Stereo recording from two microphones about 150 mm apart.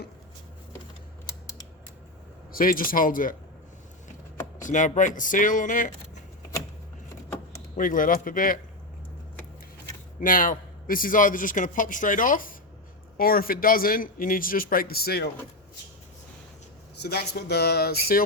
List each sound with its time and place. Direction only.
2.5 s a man's voice: 70° left (ahead or behind)
4.6 s a man's voice: 55° left (ahead or behind)
7.8 s a man's voice: 65° left (ahead or behind)
10.2 s a man's voice: 65° left (ahead or behind)
13.1 s a man's voice: 75° left (ahead or behind)
17.0 s speech: 90° left